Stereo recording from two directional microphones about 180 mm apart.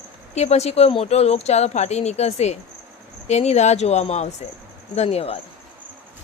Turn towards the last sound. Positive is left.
turn(degrees=35)  # may be behind; listen again after turning